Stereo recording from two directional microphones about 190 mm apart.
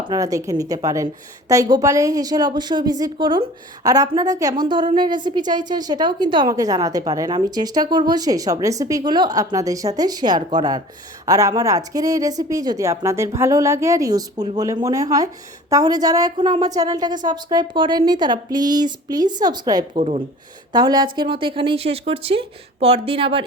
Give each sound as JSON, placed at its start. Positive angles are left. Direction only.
{"t": 0.0, "sound": "a woman's voice", "side_deg": -20}
{"t": 20.0, "sound": "speech", "side_deg": -35}
{"t": 20.7, "sound": "a woman's voice", "side_deg": -20}